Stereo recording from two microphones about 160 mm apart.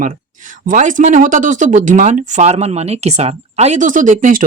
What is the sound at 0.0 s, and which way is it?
Speech, 55° right (ahead or behind).